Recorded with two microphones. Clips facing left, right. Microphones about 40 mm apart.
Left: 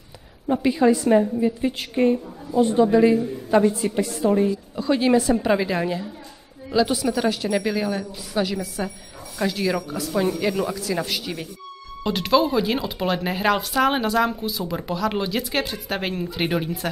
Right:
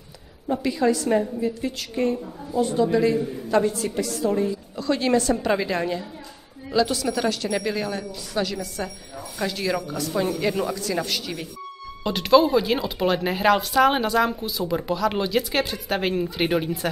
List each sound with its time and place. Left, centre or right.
0.5 s a woman's voice: left
4.7 s a woman's voice: centre